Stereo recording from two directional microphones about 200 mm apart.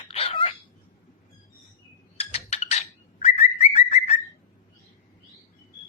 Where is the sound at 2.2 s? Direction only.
30° left (ahead or behind).